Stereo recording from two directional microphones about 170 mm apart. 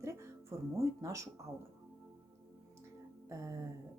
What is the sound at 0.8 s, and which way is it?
Speech, 20° right (ahead or behind).